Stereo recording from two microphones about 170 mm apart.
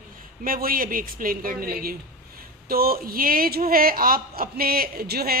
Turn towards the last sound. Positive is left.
turn(degrees=-65)  # may be behind; listen again after turning